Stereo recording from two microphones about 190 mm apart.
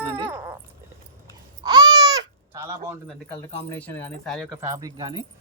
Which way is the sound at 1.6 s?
20° right (ahead or behind).